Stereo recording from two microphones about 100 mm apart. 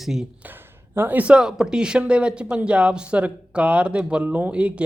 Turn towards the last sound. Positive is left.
turn(degrees=-10)  # may be behind; listen again after turning